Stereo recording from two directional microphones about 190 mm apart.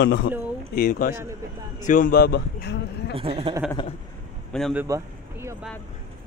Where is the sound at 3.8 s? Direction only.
25° left (ahead or behind).